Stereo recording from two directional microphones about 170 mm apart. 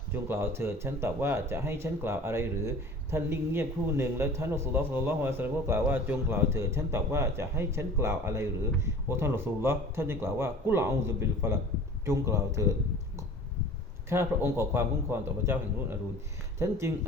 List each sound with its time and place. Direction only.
0.1 s speech: 15° right (ahead or behind)
14.1 s speech: 15° right (ahead or behind)